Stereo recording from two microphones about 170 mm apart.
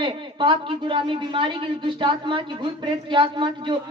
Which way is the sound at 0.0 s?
30° right (ahead or behind).